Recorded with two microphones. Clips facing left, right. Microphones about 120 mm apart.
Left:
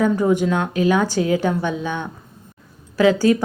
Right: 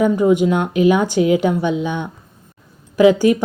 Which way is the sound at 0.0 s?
15° right (ahead or behind).